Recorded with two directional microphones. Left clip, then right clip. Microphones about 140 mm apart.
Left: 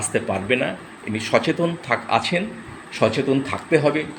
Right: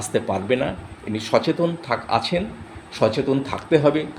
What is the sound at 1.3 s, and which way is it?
Speech, 5° right (ahead or behind).